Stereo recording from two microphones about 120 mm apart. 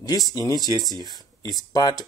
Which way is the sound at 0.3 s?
30° left (ahead or behind).